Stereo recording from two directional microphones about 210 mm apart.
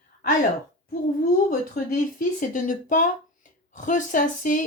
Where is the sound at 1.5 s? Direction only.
40° left (ahead or behind).